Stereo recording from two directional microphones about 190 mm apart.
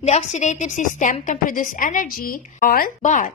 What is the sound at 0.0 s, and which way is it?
A woman's voice, 35° left (ahead or behind).